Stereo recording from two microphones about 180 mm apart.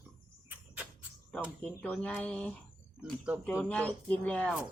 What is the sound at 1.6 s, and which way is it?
Speech, 10° left (ahead or behind).